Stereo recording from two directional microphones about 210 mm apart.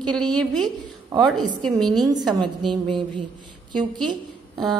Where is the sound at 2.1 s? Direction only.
20° right (ahead or behind).